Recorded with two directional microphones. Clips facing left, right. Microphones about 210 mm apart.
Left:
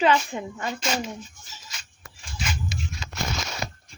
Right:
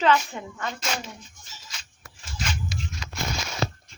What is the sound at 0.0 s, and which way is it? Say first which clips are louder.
Speech: left 1 dB; 15° left (ahead or behind).